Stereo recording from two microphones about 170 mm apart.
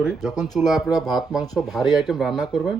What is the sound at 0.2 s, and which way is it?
Speech, centre (ahead or behind).